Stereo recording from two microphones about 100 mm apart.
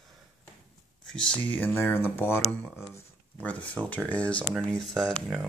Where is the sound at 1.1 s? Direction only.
10° left (ahead or behind).